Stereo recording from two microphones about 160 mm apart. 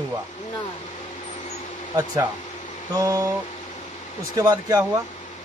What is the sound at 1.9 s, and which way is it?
Speech, 20° right (ahead or behind).